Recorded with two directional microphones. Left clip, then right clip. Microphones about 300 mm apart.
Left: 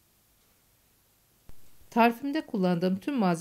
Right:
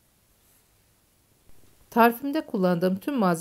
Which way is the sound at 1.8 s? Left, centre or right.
Centre.